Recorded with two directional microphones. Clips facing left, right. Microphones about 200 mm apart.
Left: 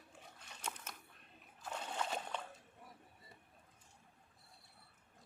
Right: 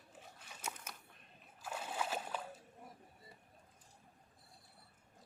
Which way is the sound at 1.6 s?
5° right (ahead or behind).